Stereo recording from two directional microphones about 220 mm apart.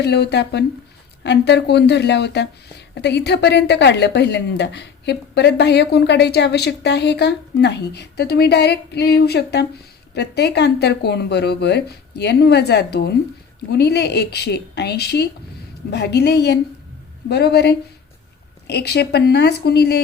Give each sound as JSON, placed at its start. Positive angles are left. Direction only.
{"t": 0.0, "sound": "speech", "side_deg": 50}